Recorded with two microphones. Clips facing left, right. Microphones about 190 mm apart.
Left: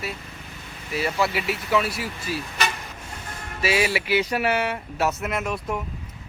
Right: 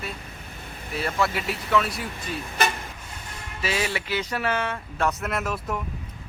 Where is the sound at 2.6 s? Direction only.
55° right (ahead or behind).